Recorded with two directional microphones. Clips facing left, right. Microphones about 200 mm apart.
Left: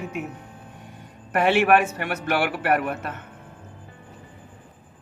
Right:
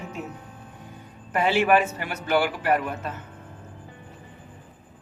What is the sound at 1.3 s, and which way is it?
A man's voice, 65° left (ahead or behind).